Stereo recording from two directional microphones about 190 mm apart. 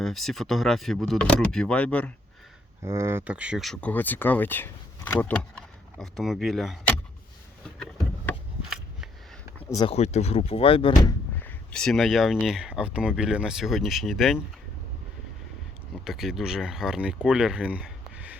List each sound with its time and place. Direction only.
0.0 s speech: centre (ahead or behind)
2.8 s speech: 15° right (ahead or behind)
7.8 s a sound: 5° left (ahead or behind)
9.6 s a sound: 15° left (ahead or behind)
9.8 s speech: 35° left (ahead or behind)
11.4 s speech: 5° left (ahead or behind)
16.0 s speech: centre (ahead or behind)